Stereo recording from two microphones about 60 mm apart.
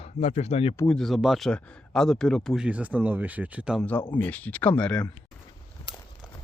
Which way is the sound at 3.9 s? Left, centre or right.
Left.